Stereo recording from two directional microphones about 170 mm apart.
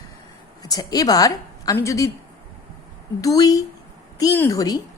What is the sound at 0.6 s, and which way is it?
A woman's voice, 20° left (ahead or behind).